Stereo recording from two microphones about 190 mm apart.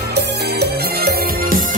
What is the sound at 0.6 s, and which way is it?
Music, 55° right (ahead or behind).